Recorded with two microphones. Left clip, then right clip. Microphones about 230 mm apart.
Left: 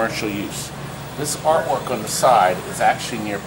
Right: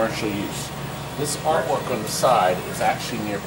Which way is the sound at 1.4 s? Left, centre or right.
Left.